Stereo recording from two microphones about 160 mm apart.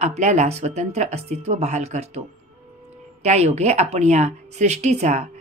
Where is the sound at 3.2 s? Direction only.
45° right (ahead or behind).